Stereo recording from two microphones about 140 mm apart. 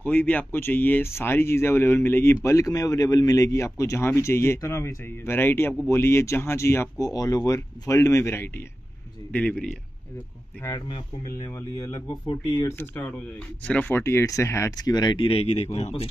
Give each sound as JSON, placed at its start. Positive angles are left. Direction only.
{"t": 0.0, "sound": "speech", "side_deg": 10}
{"t": 11.4, "sound": "speech", "side_deg": 20}
{"t": 12.7, "sound": "speech", "side_deg": 15}